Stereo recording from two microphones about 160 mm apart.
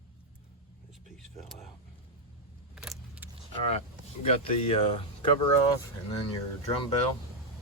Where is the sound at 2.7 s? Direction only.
5° right (ahead or behind).